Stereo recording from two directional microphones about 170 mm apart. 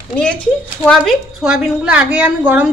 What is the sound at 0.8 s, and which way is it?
A woman's voice, centre (ahead or behind).